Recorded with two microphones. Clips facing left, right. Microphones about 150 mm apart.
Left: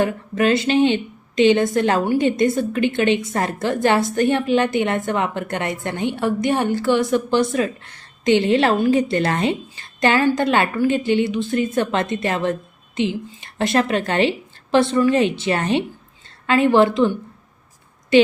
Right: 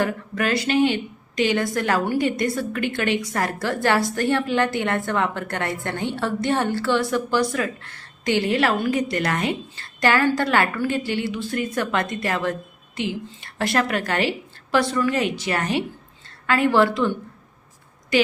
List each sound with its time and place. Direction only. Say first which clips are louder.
0.0 s a woman's voice: left 5 dB; 20° left (ahead or behind)